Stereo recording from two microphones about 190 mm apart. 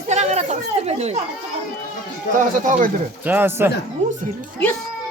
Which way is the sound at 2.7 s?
45° right (ahead or behind).